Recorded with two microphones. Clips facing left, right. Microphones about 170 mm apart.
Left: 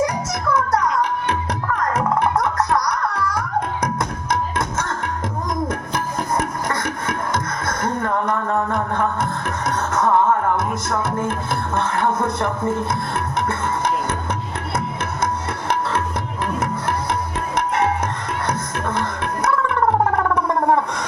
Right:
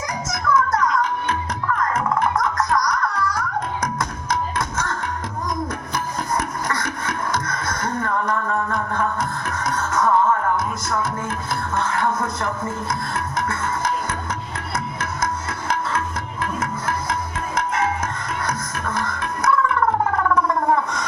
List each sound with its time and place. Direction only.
0.3 s music: 70° left (ahead or behind)
1.9 s music: 70° left (ahead or behind)
2.3 s music: 30° left (ahead or behind)
3.1 s music: 60° left (ahead or behind)
7.4 s music: 25° left (ahead or behind)
7.9 s a sound: 25° left (ahead or behind)
9.9 s music: 25° left (ahead or behind)
11.3 s music: 60° left (ahead or behind)
11.9 s music: 30° left (ahead or behind)
12.4 s speech: 60° left (ahead or behind)
16.6 s music: 65° left (ahead or behind)
19.0 s gargling: 30° left (ahead or behind)